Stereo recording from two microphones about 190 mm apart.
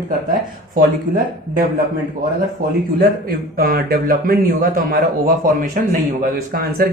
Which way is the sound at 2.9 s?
50° right (ahead or behind).